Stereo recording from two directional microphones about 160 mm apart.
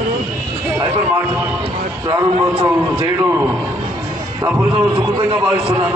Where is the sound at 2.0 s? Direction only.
30° right (ahead or behind).